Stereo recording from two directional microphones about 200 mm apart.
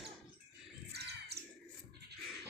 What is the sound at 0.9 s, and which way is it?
Bird, 55° right (ahead or behind).